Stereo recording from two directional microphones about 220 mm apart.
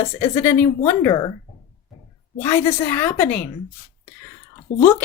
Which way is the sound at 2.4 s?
10° left (ahead or behind).